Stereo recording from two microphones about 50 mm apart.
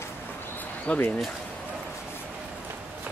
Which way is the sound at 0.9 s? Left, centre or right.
Left.